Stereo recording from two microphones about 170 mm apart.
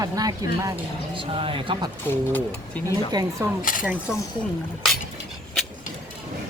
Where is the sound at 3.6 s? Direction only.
55° left (ahead or behind).